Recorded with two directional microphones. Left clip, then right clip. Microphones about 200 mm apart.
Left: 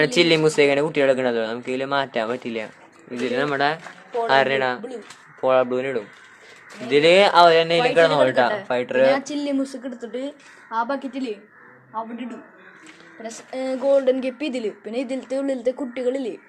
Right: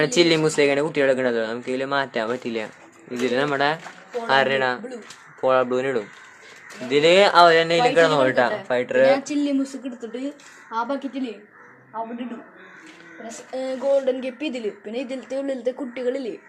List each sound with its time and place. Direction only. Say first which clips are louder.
0.0 s a woman's voice: left 1 dB; 5° left (ahead or behind)
6.9 s speech: left 1 dB; 5° left (ahead or behind)
9.1 s a woman's voice: right 1 dB; 20° left (ahead or behind)
13.2 s a woman's voice: left 1 dB; 25° left (ahead or behind)